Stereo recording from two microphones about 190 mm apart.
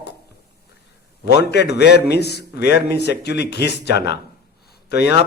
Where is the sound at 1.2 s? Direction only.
60° left (ahead or behind).